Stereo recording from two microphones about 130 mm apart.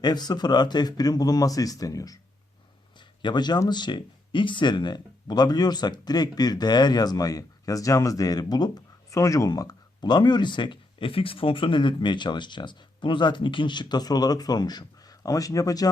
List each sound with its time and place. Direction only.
0.0 s speech: 30° left (ahead or behind)
3.2 s speech: 35° left (ahead or behind)